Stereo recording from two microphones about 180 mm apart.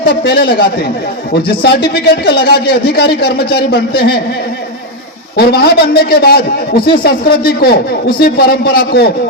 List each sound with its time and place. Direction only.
0.0 s a man's voice: 65° left (ahead or behind)
1.6 s a man's voice: 60° left (ahead or behind)
5.4 s a man's voice: 60° left (ahead or behind)
6.7 s speech: 30° left (ahead or behind)
7.0 s a man's voice: 60° left (ahead or behind)